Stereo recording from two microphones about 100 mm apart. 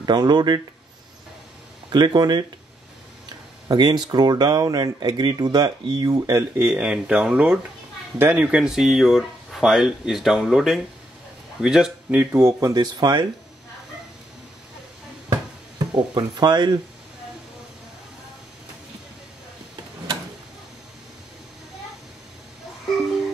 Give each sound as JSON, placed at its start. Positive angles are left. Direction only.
{"t": 0.0, "sound": "speech", "side_deg": -45}
{"t": 1.9, "sound": "speech", "side_deg": -50}
{"t": 3.6, "sound": "speech", "side_deg": -45}
{"t": 8.2, "sound": "speech", "side_deg": -25}
{"t": 8.5, "sound": "speech", "side_deg": -5}
{"t": 12.4, "sound": "speech", "side_deg": -30}
{"t": 15.9, "sound": "speech", "side_deg": -45}